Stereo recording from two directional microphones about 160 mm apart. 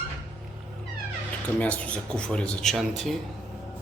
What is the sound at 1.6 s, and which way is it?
Speech, 10° left (ahead or behind).